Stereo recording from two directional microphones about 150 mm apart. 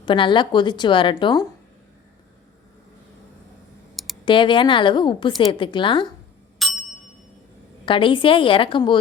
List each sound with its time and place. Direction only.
0.0 s a woman's voice: 30° left (ahead or behind)
3.9 s computer keyboard: centre (ahead or behind)
4.3 s a woman's voice: 35° left (ahead or behind)
6.6 s ding: centre (ahead or behind)
7.9 s a woman's voice: 35° left (ahead or behind)